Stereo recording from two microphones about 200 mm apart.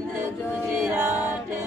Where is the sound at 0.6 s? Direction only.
10° right (ahead or behind).